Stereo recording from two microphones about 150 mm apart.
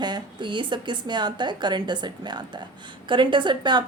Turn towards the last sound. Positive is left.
turn(degrees=-30)  # may be behind; listen again after turning